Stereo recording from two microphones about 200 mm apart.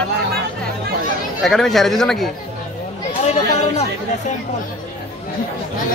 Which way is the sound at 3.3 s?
35° left (ahead or behind).